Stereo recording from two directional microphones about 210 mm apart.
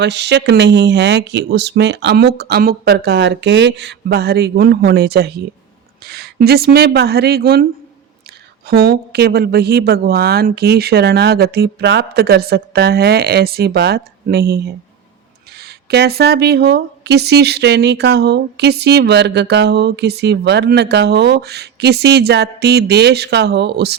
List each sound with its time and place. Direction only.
0.0 s a woman's voice: 55° right (ahead or behind)